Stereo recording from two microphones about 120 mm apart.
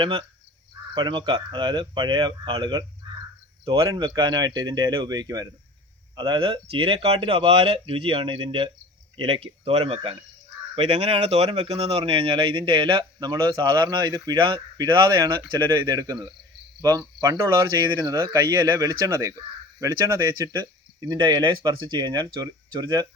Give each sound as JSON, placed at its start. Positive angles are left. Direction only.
{"t": 0.0, "sound": "speech", "side_deg": -45}
{"t": 3.8, "sound": "speech", "side_deg": -35}
{"t": 17.2, "sound": "speech", "side_deg": -25}